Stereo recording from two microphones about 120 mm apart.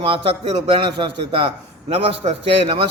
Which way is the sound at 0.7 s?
45° right (ahead or behind).